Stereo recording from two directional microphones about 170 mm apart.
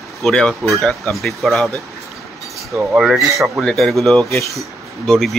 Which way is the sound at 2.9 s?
Centre (ahead or behind).